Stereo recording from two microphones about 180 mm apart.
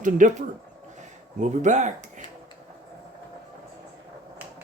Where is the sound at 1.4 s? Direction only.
40° right (ahead or behind).